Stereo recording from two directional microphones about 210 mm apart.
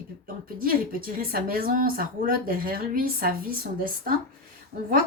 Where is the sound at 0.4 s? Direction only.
45° right (ahead or behind).